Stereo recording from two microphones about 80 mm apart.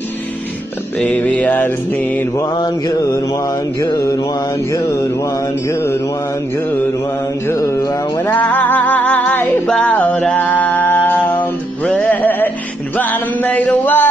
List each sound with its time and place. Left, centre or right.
0.9 s mantra: centre
2.4 s mantra: left
3.0 s mantra: left
7.5 s music: left
8.2 s mantra: left
9.7 s music: centre